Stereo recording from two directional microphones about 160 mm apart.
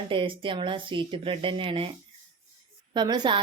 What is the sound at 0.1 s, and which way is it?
Speech, 30° right (ahead or behind).